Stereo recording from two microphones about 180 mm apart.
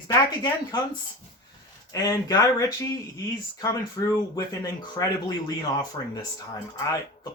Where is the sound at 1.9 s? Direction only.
20° left (ahead or behind).